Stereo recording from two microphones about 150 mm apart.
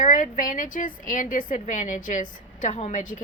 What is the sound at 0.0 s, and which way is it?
A woman's voice, 60° left (ahead or behind).